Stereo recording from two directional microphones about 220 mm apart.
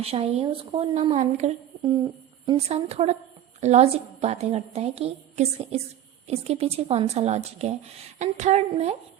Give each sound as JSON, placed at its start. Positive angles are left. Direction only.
{"t": 0.0, "sound": "a woman's voice", "side_deg": -25}